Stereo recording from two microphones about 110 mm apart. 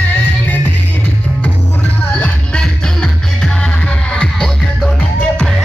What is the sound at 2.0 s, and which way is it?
Music, 15° left (ahead or behind).